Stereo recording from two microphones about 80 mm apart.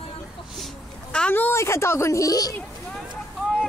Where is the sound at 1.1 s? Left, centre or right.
Centre.